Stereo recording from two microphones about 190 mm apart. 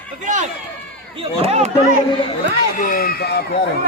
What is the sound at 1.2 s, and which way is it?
Speech, 30° right (ahead or behind).